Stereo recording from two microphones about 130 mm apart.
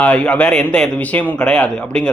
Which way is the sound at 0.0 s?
10° left (ahead or behind).